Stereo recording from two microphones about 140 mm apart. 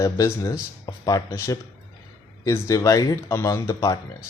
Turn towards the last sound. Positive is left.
turn(degrees=25)  # may be behind; listen again after turning